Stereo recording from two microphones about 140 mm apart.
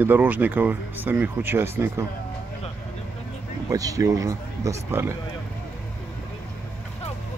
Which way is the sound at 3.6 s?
25° right (ahead or behind).